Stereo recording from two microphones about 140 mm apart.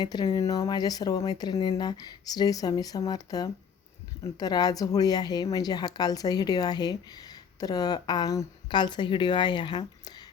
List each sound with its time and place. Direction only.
0.0 s a woman's voice: 30° left (ahead or behind)